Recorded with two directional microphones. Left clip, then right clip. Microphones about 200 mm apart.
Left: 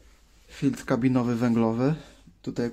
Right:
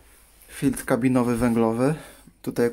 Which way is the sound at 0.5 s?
Centre (ahead or behind).